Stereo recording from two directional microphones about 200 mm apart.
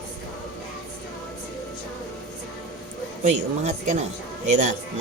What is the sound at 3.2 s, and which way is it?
Speech, 35° right (ahead or behind).